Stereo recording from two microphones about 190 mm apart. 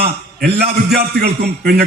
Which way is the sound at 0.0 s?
55° right (ahead or behind).